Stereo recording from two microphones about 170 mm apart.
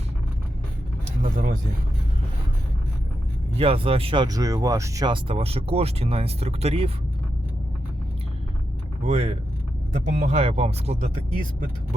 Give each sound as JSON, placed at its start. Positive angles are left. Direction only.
{"t": 1.2, "sound": "speech", "side_deg": -50}
{"t": 3.6, "sound": "speech", "side_deg": -35}
{"t": 9.0, "sound": "speech", "side_deg": -35}
{"t": 10.1, "sound": "speech", "side_deg": -55}
{"t": 10.3, "sound": "speech", "side_deg": -35}